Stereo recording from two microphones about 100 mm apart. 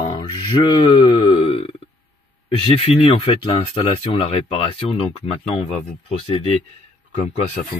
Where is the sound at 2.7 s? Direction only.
85° left; by 5.6 s 70° left (ahead or behind).